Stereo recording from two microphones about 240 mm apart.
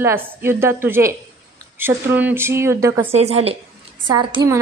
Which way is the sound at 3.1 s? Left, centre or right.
Right.